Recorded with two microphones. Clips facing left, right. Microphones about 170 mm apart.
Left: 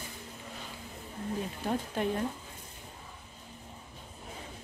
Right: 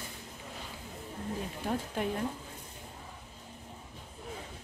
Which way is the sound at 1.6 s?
5° right (ahead or behind).